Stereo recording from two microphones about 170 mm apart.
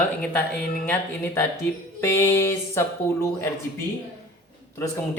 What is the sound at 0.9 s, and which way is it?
Speech, 15° left (ahead or behind).